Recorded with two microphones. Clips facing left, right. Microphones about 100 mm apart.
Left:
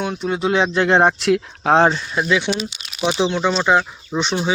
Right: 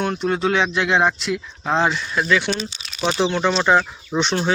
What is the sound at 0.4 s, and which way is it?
Speech, 30° left (ahead or behind).